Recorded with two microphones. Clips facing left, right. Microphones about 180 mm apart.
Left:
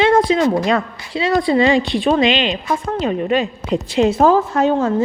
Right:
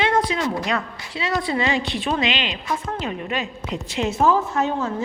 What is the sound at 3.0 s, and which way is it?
A woman's voice, 30° left (ahead or behind).